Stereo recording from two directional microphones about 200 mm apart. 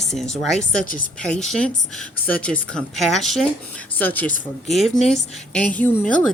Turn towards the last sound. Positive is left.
turn(degrees=5)  # may be behind; listen again after turning